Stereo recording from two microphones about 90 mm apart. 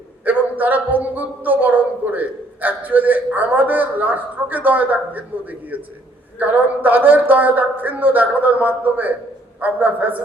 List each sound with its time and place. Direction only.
0.3 s a woman's voice: 20° right (ahead or behind)